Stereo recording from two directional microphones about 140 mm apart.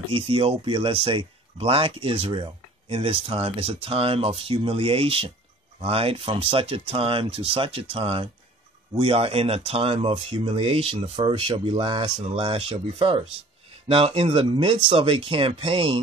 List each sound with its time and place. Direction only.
0.1 s speech: 45° right (ahead or behind)